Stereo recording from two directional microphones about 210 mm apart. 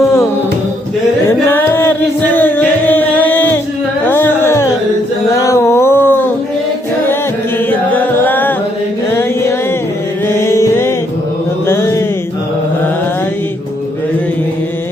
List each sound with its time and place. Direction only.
1.3 s music: 10° left (ahead or behind)
5.3 s a sound: 15° left (ahead or behind)
7.7 s music: 10° left (ahead or behind)
9.1 s a sound: 15° left (ahead or behind)
10.2 s music: 10° left (ahead or behind)
11.6 s mantra: 10° left (ahead or behind)